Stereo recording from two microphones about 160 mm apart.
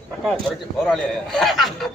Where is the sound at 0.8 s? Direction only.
Centre (ahead or behind).